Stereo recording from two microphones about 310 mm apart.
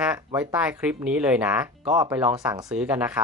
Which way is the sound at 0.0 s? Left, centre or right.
Centre.